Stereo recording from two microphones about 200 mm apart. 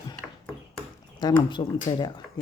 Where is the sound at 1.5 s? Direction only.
20° left (ahead or behind).